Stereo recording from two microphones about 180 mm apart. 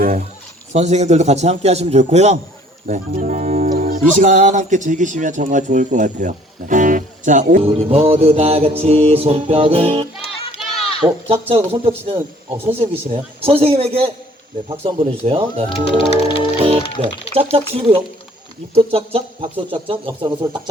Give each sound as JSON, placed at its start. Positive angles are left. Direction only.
{"t": 0.0, "sound": "a sound", "side_deg": -45}
{"t": 0.7, "sound": "speech", "side_deg": -40}
{"t": 2.8, "sound": "speech", "side_deg": -50}
{"t": 7.6, "sound": "speech", "side_deg": -35}
{"t": 10.2, "sound": "music", "side_deg": 30}
{"t": 11.0, "sound": "speech", "side_deg": -35}
{"t": 16.6, "sound": "music", "side_deg": -30}
{"t": 17.0, "sound": "speech", "side_deg": -30}